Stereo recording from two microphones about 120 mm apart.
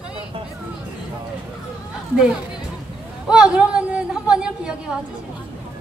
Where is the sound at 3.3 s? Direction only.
5° right (ahead or behind).